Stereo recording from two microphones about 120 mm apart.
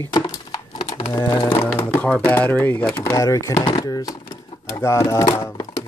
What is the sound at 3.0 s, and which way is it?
Speech, 25° left (ahead or behind).